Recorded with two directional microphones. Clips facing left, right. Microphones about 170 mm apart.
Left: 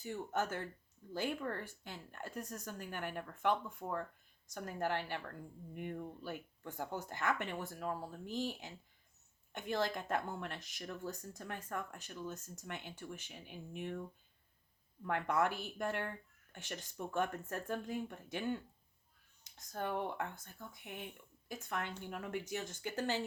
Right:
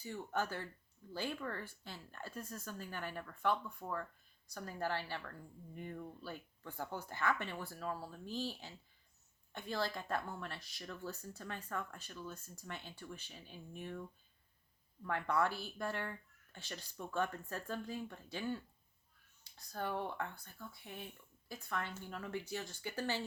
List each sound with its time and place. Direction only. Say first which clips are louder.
0.0 s speech: left 2 dB; 20° left (ahead or behind)